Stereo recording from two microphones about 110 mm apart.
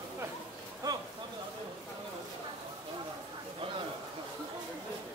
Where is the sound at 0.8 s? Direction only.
35° right (ahead or behind).